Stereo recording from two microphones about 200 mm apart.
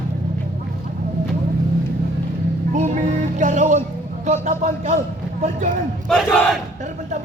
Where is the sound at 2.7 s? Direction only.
40° right (ahead or behind).